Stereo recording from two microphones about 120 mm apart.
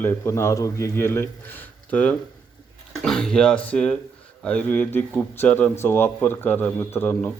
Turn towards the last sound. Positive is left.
turn(degrees=15)  # may be behind; listen again after turning